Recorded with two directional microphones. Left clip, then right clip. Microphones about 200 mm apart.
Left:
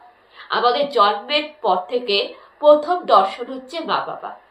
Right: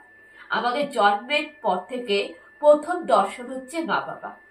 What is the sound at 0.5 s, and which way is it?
A woman's voice, 5° right (ahead or behind).